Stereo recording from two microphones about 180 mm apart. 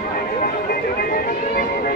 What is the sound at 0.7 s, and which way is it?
Music, 55° left (ahead or behind).